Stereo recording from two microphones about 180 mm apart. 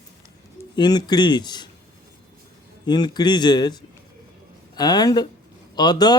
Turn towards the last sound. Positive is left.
turn(degrees=25)  # may be behind; listen again after turning